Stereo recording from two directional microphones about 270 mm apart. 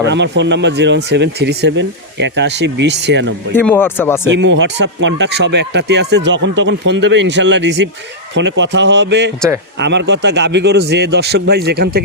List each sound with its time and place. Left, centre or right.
0.0 s speech: right
3.5 s speech: centre
4.3 s speech: right